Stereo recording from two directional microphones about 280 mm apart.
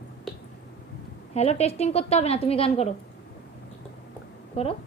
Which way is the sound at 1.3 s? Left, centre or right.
Left.